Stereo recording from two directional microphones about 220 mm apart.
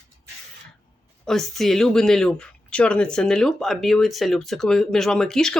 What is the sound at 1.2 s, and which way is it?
Speech, centre (ahead or behind).